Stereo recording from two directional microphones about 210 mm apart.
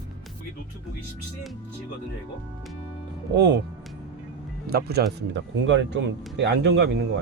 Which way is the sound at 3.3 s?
55° right (ahead or behind).